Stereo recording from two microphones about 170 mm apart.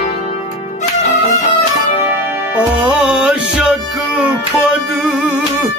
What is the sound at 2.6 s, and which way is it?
Music, 5° right (ahead or behind).